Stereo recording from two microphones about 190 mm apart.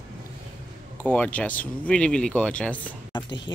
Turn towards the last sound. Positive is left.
turn(degrees=25)  # may be behind; listen again after turning